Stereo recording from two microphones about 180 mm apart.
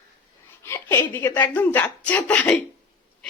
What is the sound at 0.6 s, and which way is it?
Speech, 15° left (ahead or behind).